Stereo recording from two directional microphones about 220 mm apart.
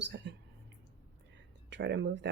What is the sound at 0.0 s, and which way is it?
Speech, 55° right (ahead or behind).